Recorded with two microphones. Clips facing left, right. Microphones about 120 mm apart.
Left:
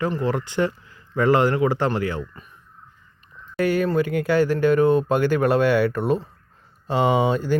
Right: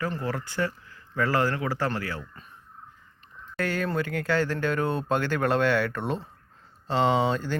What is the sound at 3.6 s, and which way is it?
Speech, 10° left (ahead or behind).